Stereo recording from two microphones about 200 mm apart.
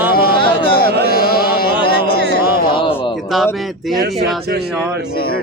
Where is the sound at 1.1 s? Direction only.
50° left (ahead or behind).